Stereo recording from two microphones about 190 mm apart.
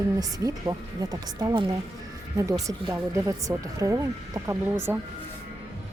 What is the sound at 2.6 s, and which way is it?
Speech, 15° right (ahead or behind).